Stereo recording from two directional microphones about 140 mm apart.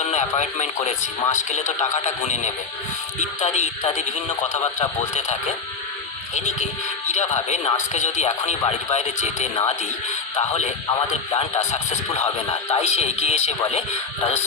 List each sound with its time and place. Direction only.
0.0 s speech: 55° left (ahead or behind)
11.7 s speech: 55° left (ahead or behind)